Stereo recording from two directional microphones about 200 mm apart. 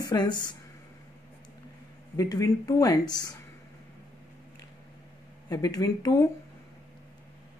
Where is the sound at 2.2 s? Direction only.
15° left (ahead or behind).